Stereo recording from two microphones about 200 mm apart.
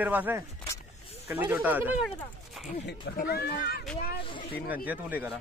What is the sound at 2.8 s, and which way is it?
A woman's voice, 55° left (ahead or behind).